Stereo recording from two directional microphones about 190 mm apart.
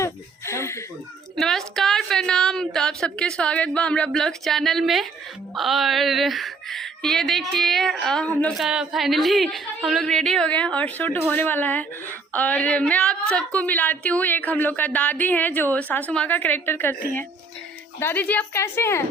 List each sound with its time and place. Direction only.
0.0 s a sound: 15° left (ahead or behind)
1.4 s a woman's voice: centre (ahead or behind)
18.0 s a woman's voice: 10° left (ahead or behind)